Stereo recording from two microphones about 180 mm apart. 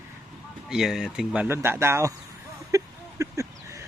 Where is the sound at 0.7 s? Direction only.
Centre (ahead or behind).